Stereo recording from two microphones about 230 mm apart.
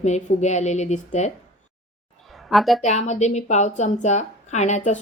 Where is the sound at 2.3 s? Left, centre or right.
Centre.